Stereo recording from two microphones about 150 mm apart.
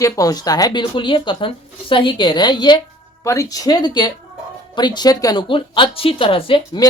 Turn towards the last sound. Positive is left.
turn(degrees=30)  # may be behind; listen again after turning